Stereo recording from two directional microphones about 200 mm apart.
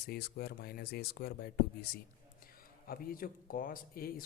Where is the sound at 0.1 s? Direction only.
50° left (ahead or behind).